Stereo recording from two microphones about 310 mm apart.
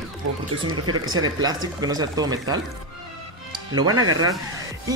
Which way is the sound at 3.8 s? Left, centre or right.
Right.